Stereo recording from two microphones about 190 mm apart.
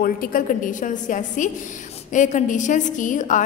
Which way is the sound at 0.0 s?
50° left (ahead or behind).